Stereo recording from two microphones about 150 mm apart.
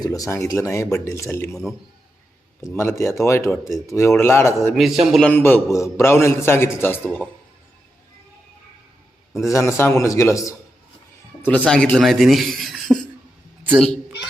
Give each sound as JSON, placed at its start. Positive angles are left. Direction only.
{"t": 0.0, "sound": "speech", "side_deg": 25}
{"t": 2.7, "sound": "a man's voice", "side_deg": 15}
{"t": 4.7, "sound": "a man's voice", "side_deg": 0}
{"t": 5.3, "sound": "a man's voice", "side_deg": 15}
{"t": 9.5, "sound": "speech", "side_deg": 20}
{"t": 11.4, "sound": "a man's voice", "side_deg": 10}